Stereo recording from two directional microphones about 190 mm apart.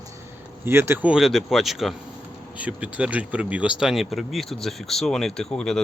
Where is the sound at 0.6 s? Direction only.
10° right (ahead or behind).